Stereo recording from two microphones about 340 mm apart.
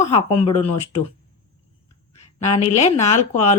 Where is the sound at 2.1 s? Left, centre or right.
Centre.